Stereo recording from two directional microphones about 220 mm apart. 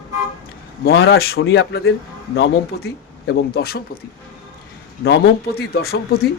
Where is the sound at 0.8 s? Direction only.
45° left (ahead or behind).